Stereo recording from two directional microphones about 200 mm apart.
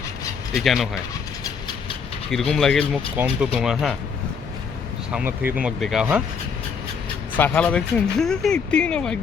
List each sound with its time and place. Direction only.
0.5 s speech: centre (ahead or behind)
2.5 s speech: 5° left (ahead or behind)
5.1 s speech: 10° right (ahead or behind)
7.3 s speech: 10° left (ahead or behind)